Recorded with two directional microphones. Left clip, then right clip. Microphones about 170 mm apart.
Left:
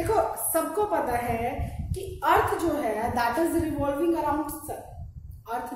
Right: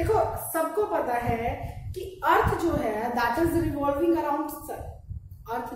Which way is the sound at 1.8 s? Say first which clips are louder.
Even; 20° left (ahead or behind).